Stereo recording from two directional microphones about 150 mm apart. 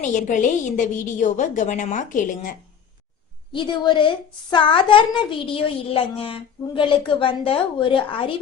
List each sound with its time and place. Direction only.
0.0 s speech: 55° left (ahead or behind)
3.5 s a woman's voice: 30° left (ahead or behind)